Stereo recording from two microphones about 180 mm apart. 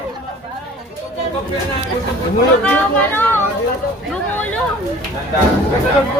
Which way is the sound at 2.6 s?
10° left (ahead or behind).